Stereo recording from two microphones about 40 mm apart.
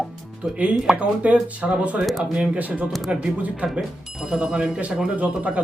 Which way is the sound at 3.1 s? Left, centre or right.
Right.